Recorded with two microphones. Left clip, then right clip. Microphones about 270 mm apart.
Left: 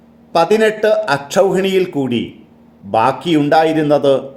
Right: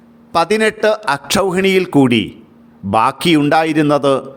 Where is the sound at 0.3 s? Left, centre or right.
Right.